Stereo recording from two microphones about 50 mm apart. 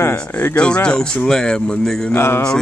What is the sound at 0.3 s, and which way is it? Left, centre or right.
Speech, left.